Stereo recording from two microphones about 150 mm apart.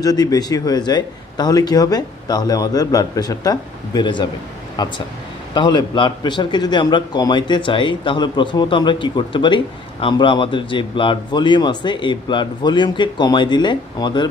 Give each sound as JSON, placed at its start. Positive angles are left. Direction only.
{"t": 0.0, "sound": "a man's voice", "side_deg": 25}